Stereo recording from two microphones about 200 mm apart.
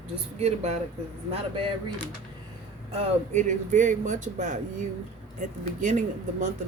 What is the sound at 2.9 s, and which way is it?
Speech, 40° right (ahead or behind).